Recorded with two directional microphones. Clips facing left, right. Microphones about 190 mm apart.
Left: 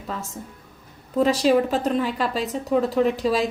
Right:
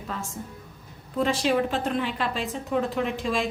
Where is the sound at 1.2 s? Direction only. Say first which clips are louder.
Left 5 dB; 40° left (ahead or behind).